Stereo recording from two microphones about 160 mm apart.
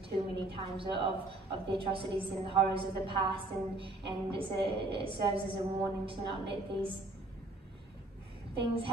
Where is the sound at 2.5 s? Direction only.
35° right (ahead or behind).